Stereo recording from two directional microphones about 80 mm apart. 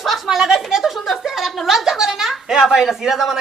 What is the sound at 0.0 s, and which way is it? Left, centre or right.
A woman's voice, centre.